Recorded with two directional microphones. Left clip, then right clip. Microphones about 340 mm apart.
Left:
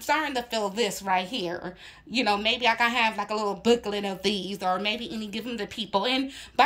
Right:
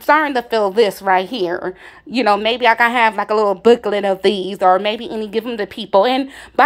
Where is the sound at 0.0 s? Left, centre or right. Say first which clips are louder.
Right 12 dB; centre.